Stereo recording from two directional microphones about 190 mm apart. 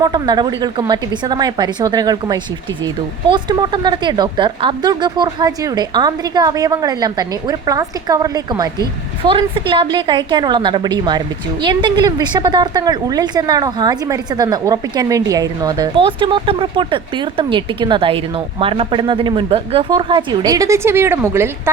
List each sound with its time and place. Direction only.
0.0 s a woman's voice: 20° right (ahead or behind)